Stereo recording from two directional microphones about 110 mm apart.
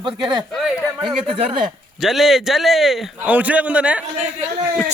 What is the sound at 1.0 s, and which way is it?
Speech, 60° right (ahead or behind).